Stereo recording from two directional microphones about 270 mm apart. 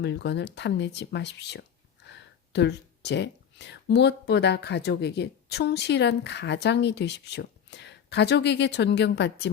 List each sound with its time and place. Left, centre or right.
0.0 s speech: left